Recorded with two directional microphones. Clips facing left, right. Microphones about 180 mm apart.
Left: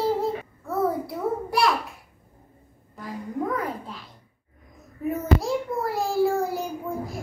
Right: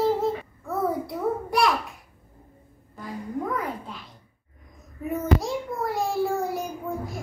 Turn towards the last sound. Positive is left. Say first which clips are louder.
# left 1 dB
turn(degrees=0)  # may be behind; listen again after turning